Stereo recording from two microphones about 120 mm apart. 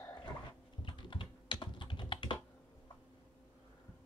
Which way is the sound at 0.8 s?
40° left (ahead or behind).